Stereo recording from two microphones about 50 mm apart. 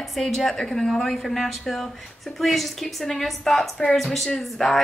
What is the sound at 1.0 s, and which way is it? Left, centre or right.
A woman's voice, centre.